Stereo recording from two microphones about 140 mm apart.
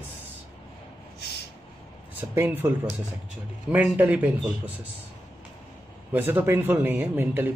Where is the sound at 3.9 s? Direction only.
10° right (ahead or behind).